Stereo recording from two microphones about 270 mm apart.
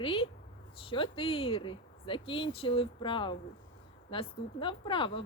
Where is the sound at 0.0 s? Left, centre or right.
Centre.